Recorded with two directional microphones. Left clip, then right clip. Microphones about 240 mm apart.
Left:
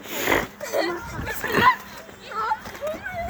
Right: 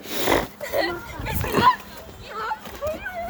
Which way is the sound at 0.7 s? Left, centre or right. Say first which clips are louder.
Even; centre.